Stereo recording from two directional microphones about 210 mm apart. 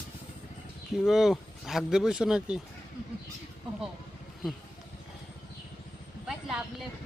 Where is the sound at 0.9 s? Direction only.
Centre (ahead or behind).